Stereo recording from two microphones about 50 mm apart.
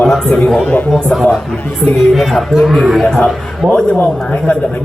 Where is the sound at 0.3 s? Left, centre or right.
Centre.